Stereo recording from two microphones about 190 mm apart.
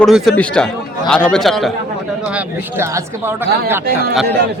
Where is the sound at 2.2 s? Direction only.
10° right (ahead or behind).